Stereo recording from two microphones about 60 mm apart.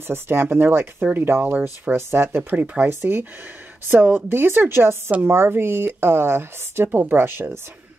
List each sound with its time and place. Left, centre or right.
0.1 s speech: right
2.5 s speech: right
3.9 s speech: right